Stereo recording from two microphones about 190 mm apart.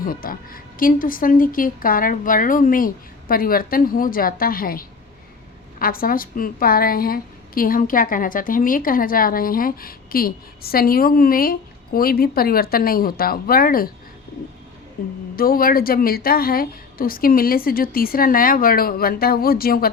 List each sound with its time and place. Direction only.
0.0 s a woman's voice: 50° left (ahead or behind)
15.0 s a woman's voice: 50° left (ahead or behind)